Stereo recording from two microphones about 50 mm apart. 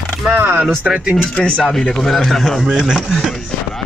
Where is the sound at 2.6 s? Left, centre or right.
Centre.